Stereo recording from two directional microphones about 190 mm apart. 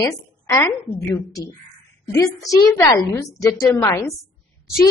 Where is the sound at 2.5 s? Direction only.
15° left (ahead or behind).